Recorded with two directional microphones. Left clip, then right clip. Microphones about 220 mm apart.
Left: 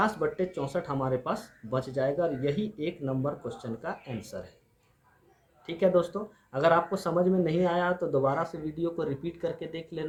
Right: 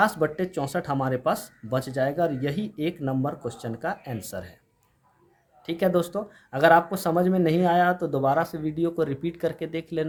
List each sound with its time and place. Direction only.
0.2 s speech: 50° right (ahead or behind)
5.6 s speech: 50° right (ahead or behind)